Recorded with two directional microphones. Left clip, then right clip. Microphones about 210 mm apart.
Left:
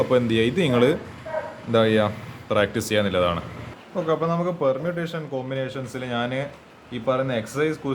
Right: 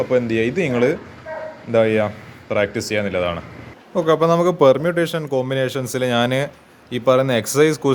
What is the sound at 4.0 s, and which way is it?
Speech, 45° right (ahead or behind).